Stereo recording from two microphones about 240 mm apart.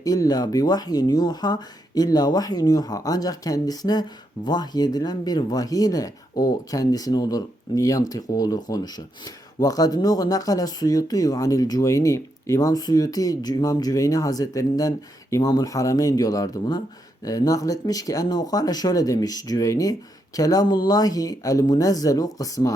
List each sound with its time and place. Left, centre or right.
0.0 s speech: centre